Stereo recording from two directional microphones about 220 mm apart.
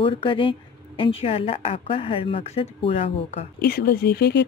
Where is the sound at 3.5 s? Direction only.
45° left (ahead or behind).